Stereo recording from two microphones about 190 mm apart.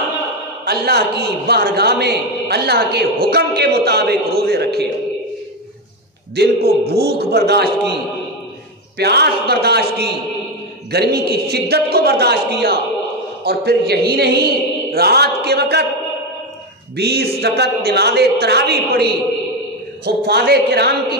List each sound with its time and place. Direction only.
0.7 s a man's voice: 60° right (ahead or behind)
6.3 s a man's voice: 55° right (ahead or behind)
8.9 s a man's voice: 60° right (ahead or behind)
16.9 s a man's voice: 60° right (ahead or behind)